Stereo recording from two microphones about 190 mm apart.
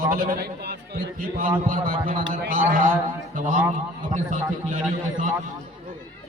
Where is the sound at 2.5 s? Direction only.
45° right (ahead or behind).